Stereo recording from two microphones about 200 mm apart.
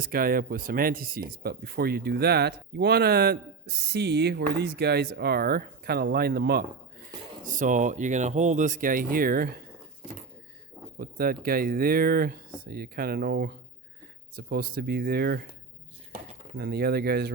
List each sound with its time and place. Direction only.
0.0 s speech: 45° right (ahead or behind)
10.9 s speech: 45° right (ahead or behind)
16.6 s speech: 50° right (ahead or behind)